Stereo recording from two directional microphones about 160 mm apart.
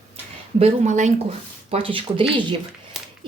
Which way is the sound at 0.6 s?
45° right (ahead or behind).